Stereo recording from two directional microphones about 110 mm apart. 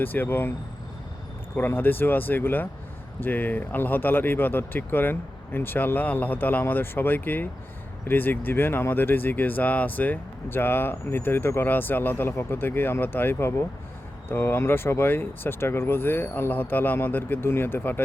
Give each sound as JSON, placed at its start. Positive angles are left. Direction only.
{"t": 0.0, "sound": "speech", "side_deg": 15}
{"t": 1.5, "sound": "speech", "side_deg": 20}